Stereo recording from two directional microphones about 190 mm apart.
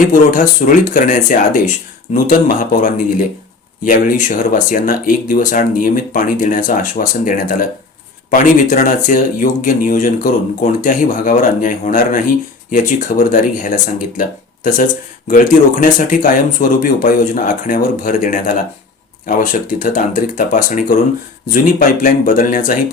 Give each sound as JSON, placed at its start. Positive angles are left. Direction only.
{"t": 0.0, "sound": "speech", "side_deg": 45}